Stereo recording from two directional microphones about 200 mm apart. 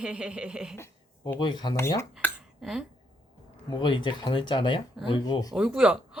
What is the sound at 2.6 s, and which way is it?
Speech, centre (ahead or behind).